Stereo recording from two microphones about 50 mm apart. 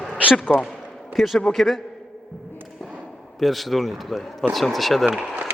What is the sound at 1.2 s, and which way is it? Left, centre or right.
Speech, centre.